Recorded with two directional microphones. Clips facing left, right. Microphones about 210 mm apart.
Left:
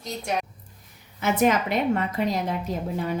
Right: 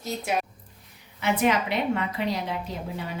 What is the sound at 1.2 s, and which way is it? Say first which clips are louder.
A woman's voice: left 2 dB; 45° left (ahead or behind).